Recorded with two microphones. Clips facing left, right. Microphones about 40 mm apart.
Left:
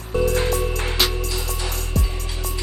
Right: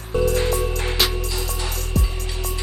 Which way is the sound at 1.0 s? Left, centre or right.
Centre.